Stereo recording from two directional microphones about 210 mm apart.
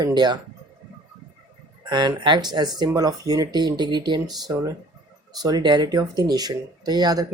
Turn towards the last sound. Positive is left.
turn(degrees=-20)  # may be behind; listen again after turning